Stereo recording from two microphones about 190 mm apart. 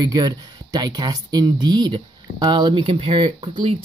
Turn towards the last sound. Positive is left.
turn(degrees=-25)  # may be behind; listen again after turning